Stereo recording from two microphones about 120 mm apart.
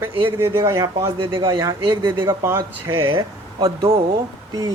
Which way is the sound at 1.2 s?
45° right (ahead or behind).